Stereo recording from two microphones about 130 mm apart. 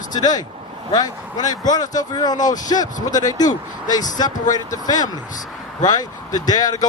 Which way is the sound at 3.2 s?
30° left (ahead or behind).